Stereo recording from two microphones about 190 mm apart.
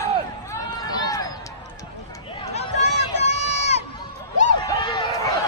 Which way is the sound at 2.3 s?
30° left (ahead or behind).